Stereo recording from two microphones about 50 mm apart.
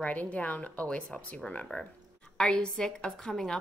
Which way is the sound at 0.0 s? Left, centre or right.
Left.